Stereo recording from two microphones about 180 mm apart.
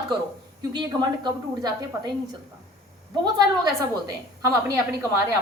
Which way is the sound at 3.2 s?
20° right (ahead or behind).